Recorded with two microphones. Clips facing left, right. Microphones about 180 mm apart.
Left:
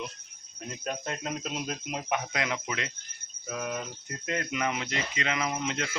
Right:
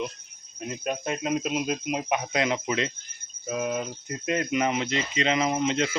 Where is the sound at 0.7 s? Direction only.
15° right (ahead or behind).